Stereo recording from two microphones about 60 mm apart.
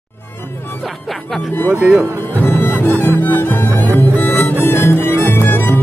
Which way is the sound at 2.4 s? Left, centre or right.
Left.